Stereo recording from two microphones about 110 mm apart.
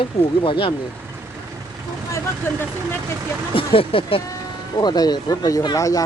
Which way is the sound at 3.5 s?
55° left (ahead or behind).